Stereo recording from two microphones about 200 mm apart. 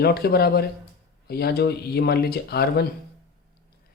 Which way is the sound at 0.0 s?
50° left (ahead or behind).